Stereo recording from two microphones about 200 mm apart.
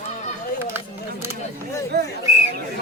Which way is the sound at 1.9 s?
55° right (ahead or behind).